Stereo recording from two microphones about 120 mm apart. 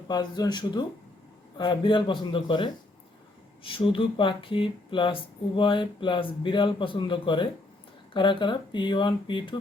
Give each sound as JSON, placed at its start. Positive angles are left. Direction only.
{"t": 0.1, "sound": "speech", "side_deg": 35}